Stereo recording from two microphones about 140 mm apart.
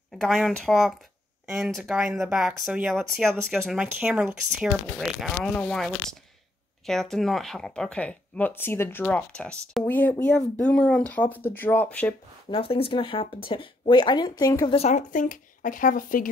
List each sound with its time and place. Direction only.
0.2 s speech: centre (ahead or behind)
12.4 s speech: 40° left (ahead or behind)
14.7 s speech: 50° left (ahead or behind); by 16.3 s 75° left (ahead or behind)